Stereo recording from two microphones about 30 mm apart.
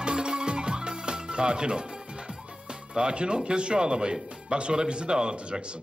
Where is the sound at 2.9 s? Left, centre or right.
Right.